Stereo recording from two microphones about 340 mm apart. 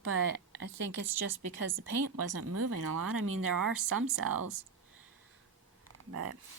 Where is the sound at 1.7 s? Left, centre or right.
Right.